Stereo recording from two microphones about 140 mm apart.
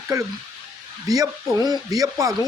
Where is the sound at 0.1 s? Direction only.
25° right (ahead or behind).